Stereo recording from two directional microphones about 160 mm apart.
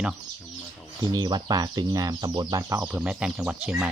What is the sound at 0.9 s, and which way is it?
Speech, 25° right (ahead or behind).